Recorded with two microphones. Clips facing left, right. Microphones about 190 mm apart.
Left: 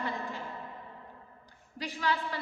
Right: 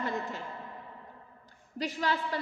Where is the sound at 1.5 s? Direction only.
45° right (ahead or behind).